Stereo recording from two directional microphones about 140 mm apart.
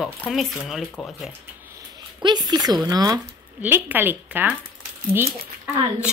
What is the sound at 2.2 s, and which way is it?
Speech, 30° right (ahead or behind).